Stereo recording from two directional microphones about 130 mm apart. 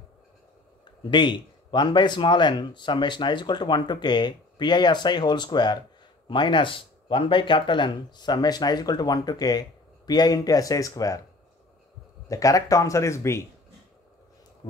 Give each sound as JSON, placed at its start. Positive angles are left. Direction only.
{"t": 1.1, "sound": "a man's voice", "side_deg": 35}
{"t": 12.3, "sound": "speech", "side_deg": 25}